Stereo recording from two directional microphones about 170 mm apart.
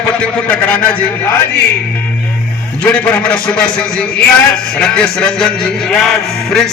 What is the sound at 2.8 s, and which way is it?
A man's voice, 10° left (ahead or behind).